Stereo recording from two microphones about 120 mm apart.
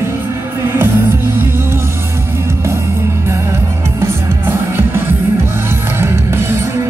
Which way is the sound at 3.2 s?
20° right (ahead or behind).